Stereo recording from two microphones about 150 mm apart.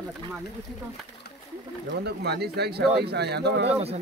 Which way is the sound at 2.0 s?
90° right.